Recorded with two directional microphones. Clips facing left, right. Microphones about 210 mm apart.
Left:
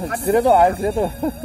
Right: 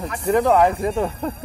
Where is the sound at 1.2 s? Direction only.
15° left (ahead or behind).